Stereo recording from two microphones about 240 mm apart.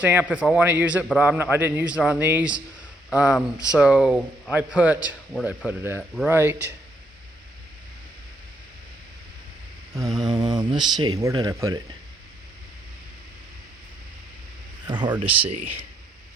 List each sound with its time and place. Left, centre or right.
0.0 s a man's voice: centre
10.2 s a man's voice: centre
14.8 s speech: centre
15.4 s speech: right